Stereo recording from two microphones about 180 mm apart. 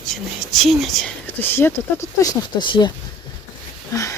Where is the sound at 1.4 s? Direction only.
10° left (ahead or behind).